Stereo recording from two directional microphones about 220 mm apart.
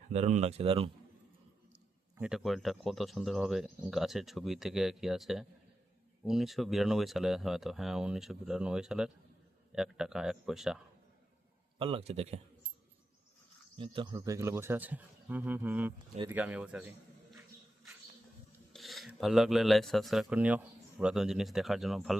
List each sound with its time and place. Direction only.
0.1 s speech: 30° right (ahead or behind)
2.1 s speech: 5° right (ahead or behind)
11.8 s speech: 25° right (ahead or behind)
13.7 s a man's voice: 25° right (ahead or behind); by 16.9 s 5° right (ahead or behind)
18.7 s speech: centre (ahead or behind)